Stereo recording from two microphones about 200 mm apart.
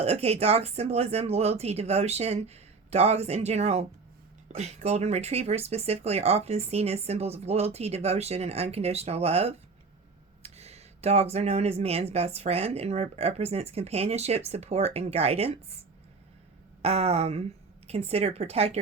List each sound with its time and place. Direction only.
0.0 s speech: 30° right (ahead or behind)
16.8 s speech: 30° right (ahead or behind)